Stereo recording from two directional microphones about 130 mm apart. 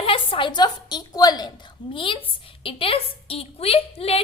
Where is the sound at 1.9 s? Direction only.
40° left (ahead or behind).